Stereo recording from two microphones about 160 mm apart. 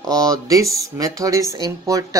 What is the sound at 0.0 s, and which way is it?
Speech, 25° right (ahead or behind).